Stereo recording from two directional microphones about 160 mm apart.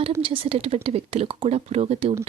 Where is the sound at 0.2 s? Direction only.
35° right (ahead or behind).